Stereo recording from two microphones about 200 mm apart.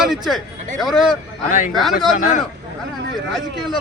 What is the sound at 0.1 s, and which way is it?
Speech, centre (ahead or behind).